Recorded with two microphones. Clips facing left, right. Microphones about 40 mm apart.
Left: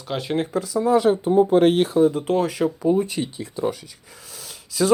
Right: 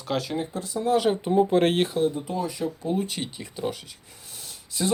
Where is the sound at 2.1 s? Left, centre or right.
Left.